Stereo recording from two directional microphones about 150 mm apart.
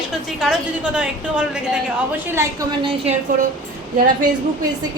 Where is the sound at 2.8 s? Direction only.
35° right (ahead or behind).